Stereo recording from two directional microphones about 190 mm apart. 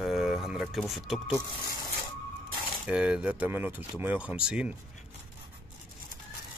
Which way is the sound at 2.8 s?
5° right (ahead or behind).